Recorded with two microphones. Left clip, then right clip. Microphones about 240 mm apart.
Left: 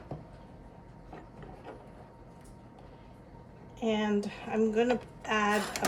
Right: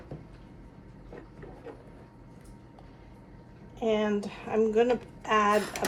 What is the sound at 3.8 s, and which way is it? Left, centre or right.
A woman's voice, right.